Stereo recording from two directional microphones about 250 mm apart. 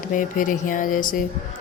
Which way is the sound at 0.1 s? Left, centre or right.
Left.